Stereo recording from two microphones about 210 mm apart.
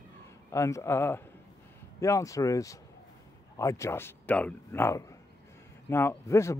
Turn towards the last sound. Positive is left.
turn(degrees=15)  # may be behind; listen again after turning